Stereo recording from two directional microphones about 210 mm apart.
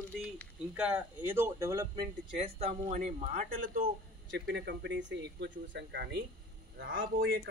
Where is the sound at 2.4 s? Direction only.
30° right (ahead or behind).